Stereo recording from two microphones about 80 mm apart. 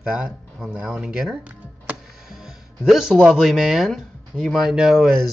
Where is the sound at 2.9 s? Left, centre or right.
Centre.